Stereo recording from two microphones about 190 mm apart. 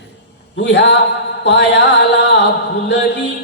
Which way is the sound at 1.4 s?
65° left (ahead or behind).